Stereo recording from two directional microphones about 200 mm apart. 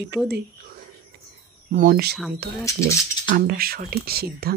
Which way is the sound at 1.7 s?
45° right (ahead or behind).